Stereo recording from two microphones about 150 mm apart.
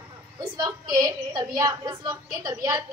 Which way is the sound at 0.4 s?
20° right (ahead or behind).